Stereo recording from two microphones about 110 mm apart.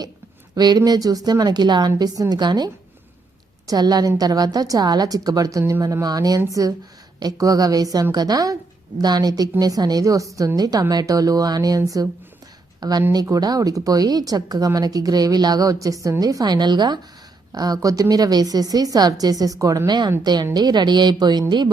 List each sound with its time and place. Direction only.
0.5 s a woman's voice: 35° right (ahead or behind)
3.7 s a woman's voice: 35° right (ahead or behind)
12.8 s a woman's voice: 40° right (ahead or behind)